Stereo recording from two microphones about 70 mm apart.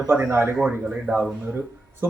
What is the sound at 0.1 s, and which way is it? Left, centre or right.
Speech, right.